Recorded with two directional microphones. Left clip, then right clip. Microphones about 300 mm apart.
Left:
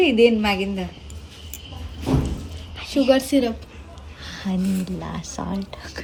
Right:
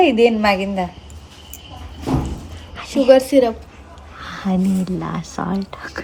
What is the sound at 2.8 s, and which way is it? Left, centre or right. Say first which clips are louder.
Speech: right 6 dB; centre.